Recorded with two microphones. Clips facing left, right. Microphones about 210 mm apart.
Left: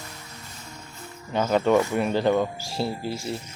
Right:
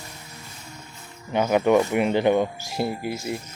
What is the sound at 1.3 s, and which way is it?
Speech, 15° right (ahead or behind).